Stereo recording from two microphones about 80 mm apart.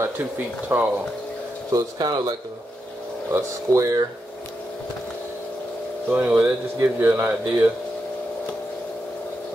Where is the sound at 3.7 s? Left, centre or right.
Right.